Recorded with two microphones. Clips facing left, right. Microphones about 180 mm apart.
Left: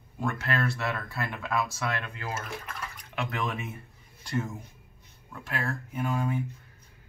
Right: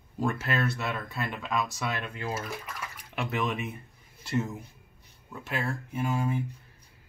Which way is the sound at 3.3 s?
Centre (ahead or behind).